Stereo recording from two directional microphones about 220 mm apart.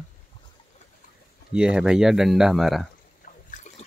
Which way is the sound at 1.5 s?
5° right (ahead or behind).